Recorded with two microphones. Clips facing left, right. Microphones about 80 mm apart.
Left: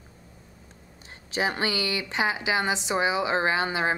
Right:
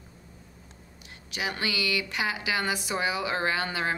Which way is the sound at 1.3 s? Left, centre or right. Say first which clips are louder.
Left 5 dB; left.